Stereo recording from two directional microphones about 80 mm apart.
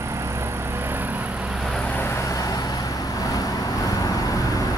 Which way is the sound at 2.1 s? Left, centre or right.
Left.